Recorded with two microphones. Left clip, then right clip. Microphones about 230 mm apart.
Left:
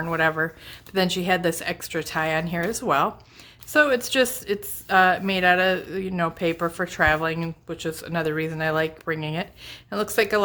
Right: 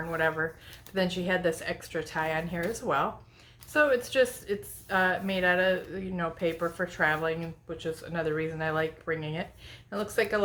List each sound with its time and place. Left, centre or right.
0.1 s a woman's voice: left